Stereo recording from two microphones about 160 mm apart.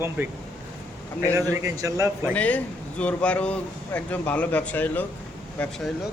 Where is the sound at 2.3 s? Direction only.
10° left (ahead or behind).